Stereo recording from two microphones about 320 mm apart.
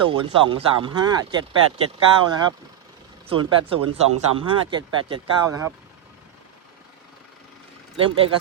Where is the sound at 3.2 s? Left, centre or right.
Centre.